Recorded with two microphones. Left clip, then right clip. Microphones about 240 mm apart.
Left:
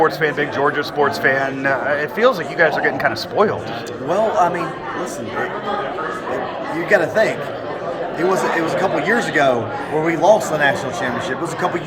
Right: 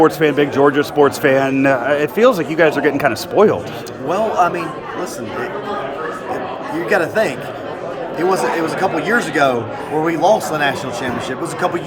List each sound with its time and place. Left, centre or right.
0.0 s speech: right
4.1 s a man's voice: centre
6.8 s speech: centre
8.8 s speech: centre